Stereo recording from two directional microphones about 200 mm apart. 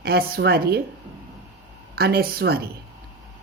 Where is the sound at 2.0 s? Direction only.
50° right (ahead or behind).